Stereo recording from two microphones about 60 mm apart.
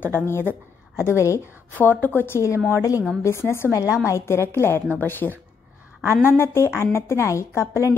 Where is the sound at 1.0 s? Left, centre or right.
Left.